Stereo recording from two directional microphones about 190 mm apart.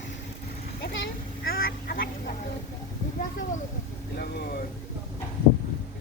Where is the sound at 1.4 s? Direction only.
50° left (ahead or behind).